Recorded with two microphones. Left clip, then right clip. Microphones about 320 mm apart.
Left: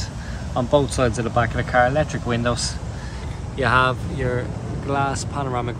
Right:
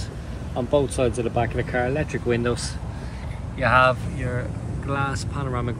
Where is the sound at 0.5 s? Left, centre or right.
Left.